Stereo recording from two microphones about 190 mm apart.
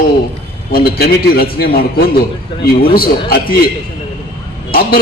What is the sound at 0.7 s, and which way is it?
A man's voice, 55° left (ahead or behind).